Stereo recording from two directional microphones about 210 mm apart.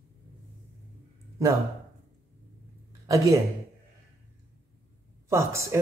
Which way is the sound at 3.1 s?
15° right (ahead or behind).